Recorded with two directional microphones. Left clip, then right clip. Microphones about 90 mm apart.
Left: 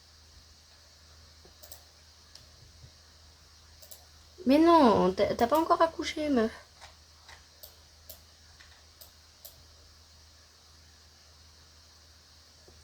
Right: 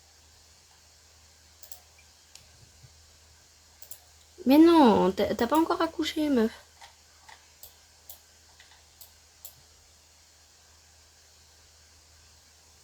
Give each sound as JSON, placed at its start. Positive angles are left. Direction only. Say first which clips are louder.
{"t": 4.4, "sound": "speech", "louder": "right 2 dB", "side_deg": -90}